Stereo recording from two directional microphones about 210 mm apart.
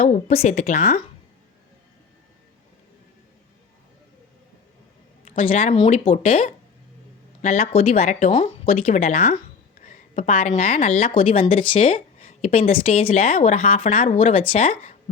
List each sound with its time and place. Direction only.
0.0 s speech: 30° left (ahead or behind)
5.2 s a woman's voice: 40° left (ahead or behind)